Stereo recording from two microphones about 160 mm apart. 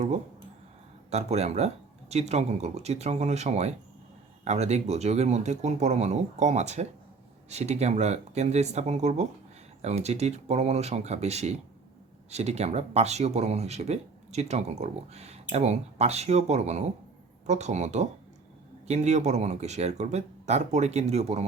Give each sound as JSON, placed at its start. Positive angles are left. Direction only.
{"t": 1.1, "sound": "speech", "side_deg": -45}